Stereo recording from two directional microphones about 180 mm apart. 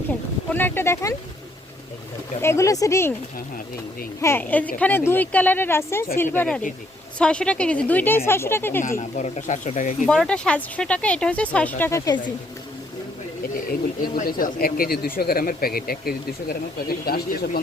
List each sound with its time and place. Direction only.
0.1 s speech: 10° left (ahead or behind)
2.4 s speech: 15° left (ahead or behind)
4.2 s speech: 10° left (ahead or behind)
8.8 s speech: 45° left (ahead or behind)
10.1 s speech: 5° left (ahead or behind)
14.2 s speech: 50° left (ahead or behind)